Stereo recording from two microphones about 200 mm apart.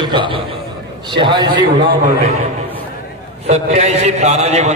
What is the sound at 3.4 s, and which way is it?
A man's voice, 35° right (ahead or behind).